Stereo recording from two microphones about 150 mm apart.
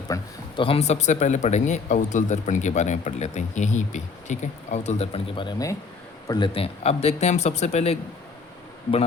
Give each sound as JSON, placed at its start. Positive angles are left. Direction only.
{"t": 0.1, "sound": "a man's voice", "side_deg": 35}
{"t": 5.4, "sound": "a man's voice", "side_deg": 25}